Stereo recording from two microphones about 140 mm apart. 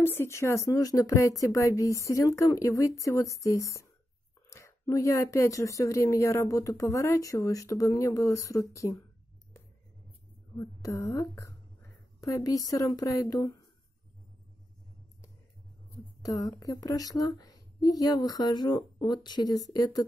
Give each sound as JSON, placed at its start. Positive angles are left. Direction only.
{"t": 0.0, "sound": "speech", "side_deg": 15}
{"t": 10.6, "sound": "a woman's voice", "side_deg": 20}
{"t": 16.3, "sound": "speech", "side_deg": 25}